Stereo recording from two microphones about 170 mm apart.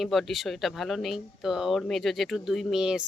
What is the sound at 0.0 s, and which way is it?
Speech, centre (ahead or behind).